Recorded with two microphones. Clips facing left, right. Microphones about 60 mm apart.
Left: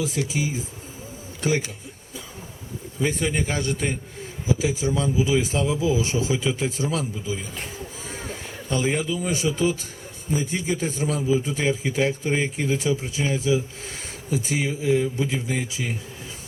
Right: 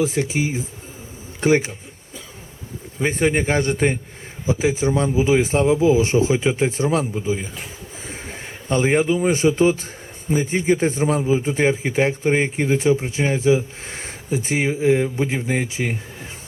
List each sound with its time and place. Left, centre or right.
0.0 s a man's voice: right
3.0 s a man's voice: right
8.0 s a sound: right
10.3 s a man's voice: right